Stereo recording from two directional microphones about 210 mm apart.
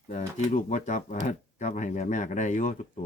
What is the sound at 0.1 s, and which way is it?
A man's voice, 35° left (ahead or behind).